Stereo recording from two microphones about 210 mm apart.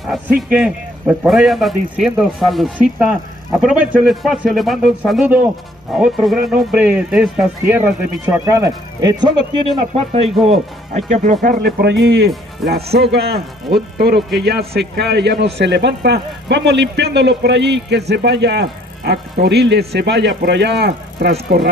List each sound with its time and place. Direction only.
0.0 s speech: centre (ahead or behind); by 9.1 s 15° right (ahead or behind)
9.9 s a man's voice: 30° right (ahead or behind); by 21.6 s 50° right (ahead or behind)